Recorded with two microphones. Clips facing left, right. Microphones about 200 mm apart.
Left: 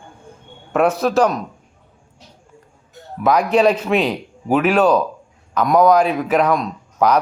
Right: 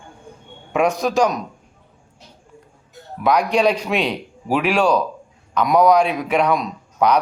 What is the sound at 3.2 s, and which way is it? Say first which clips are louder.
A man's voice: left 2 dB; 5° left (ahead or behind).